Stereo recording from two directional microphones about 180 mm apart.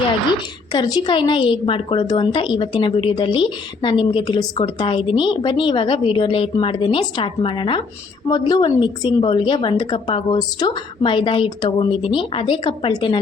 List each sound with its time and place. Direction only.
0.7 s a woman's voice: 25° left (ahead or behind)